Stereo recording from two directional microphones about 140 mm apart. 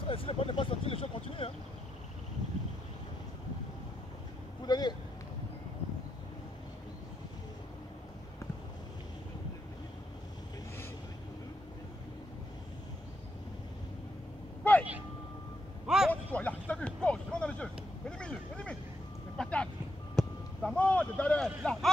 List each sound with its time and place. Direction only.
0.0 s vehicle: 40° left (ahead or behind)
4.6 s vehicle: 30° left (ahead or behind)
14.6 s vehicle: 10° left (ahead or behind)
16.1 s vehicle: 10° left (ahead or behind)
20.2 s a sound: 5° left (ahead or behind)